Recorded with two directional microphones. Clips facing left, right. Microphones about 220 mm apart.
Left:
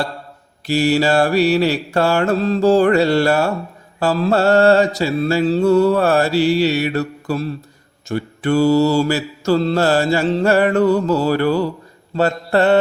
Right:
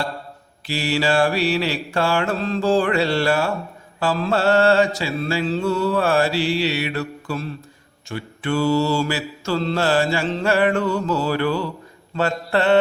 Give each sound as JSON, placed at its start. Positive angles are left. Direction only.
{"t": 0.7, "sound": "mantra", "side_deg": 45}